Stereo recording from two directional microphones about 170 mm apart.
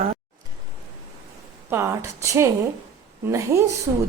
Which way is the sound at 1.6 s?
15° right (ahead or behind).